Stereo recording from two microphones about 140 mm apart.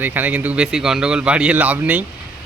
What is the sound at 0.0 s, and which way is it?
Speech, 15° right (ahead or behind).